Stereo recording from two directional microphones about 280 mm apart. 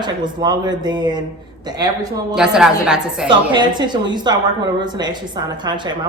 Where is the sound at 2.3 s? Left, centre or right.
Centre.